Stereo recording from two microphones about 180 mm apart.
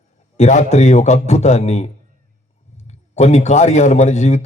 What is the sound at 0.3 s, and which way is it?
A man's voice, 40° left (ahead or behind).